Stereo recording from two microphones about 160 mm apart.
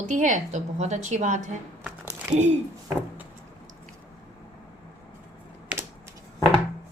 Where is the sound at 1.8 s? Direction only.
15° right (ahead or behind).